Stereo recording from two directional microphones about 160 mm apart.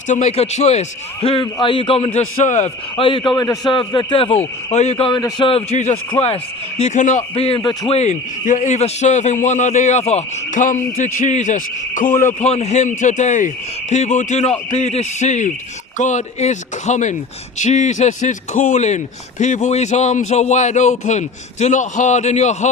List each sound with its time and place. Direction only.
0.1 s a man's voice: 40° left (ahead or behind)
3.0 s a man's voice: 30° left (ahead or behind)